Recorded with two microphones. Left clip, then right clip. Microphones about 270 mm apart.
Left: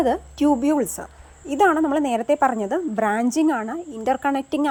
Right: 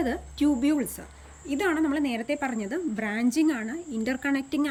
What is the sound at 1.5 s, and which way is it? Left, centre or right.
Speech, centre.